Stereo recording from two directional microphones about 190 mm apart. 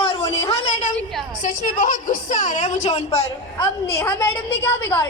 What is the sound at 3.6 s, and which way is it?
A woman's voice, 15° left (ahead or behind).